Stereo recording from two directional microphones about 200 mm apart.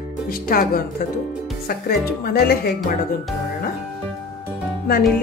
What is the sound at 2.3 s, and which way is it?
Music, 50° left (ahead or behind).